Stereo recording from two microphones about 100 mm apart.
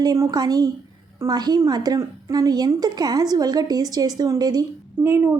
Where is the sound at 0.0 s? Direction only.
40° right (ahead or behind).